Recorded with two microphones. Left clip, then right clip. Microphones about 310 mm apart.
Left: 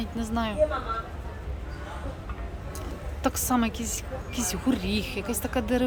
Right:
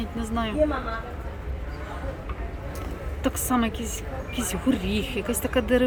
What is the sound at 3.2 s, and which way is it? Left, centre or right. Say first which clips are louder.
A woman's voice: right 1 dB; centre.